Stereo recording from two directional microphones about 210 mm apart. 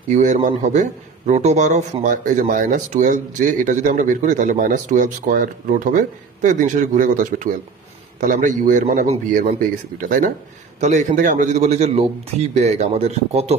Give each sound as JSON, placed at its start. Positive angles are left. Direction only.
{"t": 0.1, "sound": "a man's voice", "side_deg": -35}